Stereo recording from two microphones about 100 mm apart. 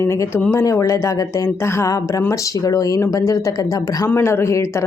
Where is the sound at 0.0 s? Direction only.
25° left (ahead or behind).